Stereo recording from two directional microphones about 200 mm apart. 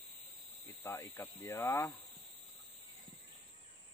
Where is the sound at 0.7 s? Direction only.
10° left (ahead or behind).